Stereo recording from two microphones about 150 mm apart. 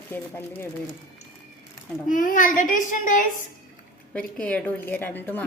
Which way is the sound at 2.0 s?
60° left (ahead or behind).